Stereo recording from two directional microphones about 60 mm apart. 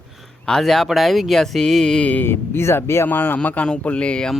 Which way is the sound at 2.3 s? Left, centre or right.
Left.